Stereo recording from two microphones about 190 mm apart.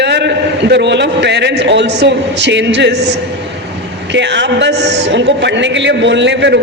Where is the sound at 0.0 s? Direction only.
65° right (ahead or behind).